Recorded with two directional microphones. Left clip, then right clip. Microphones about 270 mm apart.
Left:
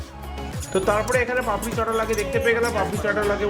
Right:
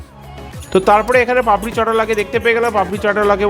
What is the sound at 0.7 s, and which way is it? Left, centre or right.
Speech, right.